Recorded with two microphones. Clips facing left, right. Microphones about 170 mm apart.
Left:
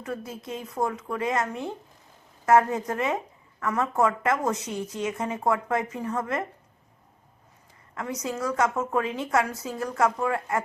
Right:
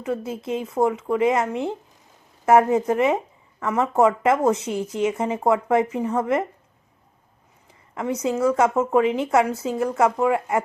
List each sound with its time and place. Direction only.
0.1 s speech: 25° right (ahead or behind)
7.9 s speech: 25° right (ahead or behind)